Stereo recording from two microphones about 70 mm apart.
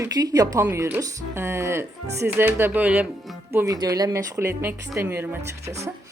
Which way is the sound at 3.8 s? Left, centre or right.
Right.